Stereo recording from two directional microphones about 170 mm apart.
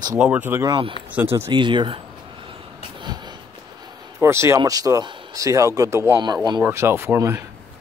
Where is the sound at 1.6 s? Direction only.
30° right (ahead or behind).